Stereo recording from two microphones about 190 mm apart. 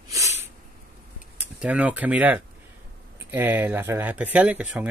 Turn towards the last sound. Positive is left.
turn(degrees=-5)  # may be behind; listen again after turning